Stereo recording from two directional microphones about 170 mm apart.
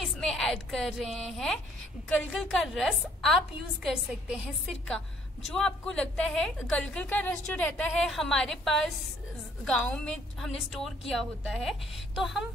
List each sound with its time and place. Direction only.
0.0 s a woman's voice: centre (ahead or behind)